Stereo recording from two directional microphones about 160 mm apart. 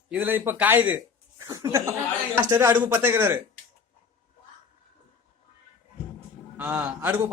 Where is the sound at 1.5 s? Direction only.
20° right (ahead or behind).